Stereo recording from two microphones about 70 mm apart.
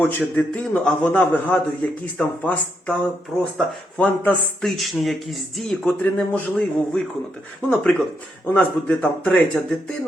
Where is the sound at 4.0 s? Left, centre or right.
Left.